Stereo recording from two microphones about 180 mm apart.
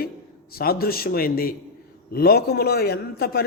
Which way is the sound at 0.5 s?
55° left (ahead or behind).